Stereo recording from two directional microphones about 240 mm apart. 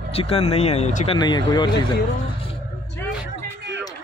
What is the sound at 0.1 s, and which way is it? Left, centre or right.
Speech, left.